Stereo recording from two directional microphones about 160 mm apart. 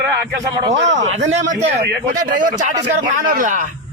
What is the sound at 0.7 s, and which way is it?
A man's voice, 45° right (ahead or behind).